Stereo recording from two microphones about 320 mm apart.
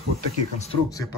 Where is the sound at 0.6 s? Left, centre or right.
Centre.